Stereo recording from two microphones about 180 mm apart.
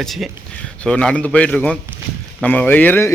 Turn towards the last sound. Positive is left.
turn(degrees=10)  # may be behind; listen again after turning